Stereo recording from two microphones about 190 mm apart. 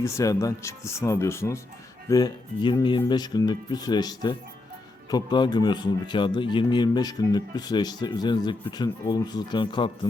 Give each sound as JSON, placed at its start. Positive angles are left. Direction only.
{"t": 0.0, "sound": "speech", "side_deg": 15}